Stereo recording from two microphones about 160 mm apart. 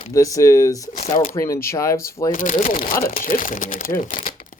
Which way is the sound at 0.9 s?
50° left (ahead or behind).